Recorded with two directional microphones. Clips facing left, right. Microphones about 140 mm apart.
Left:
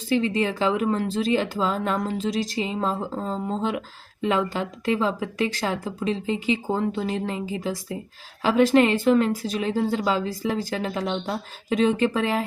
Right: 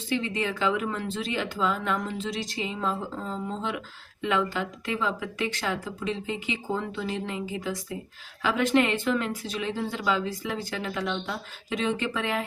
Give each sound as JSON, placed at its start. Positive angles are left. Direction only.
{"t": 0.1, "sound": "speech", "side_deg": 35}